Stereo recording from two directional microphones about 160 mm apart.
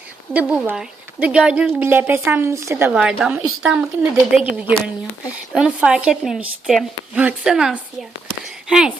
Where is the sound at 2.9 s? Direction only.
5° right (ahead or behind).